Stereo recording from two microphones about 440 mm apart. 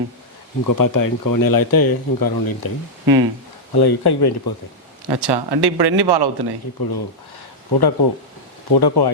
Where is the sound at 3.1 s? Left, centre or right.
Right.